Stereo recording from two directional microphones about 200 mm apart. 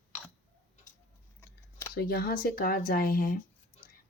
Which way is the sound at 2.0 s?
50° left (ahead or behind).